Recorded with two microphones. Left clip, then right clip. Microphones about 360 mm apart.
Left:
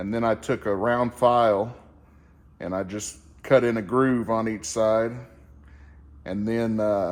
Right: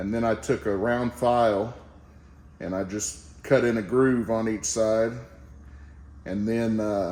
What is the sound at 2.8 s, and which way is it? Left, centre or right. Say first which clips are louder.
Speech: right 2 dB; centre.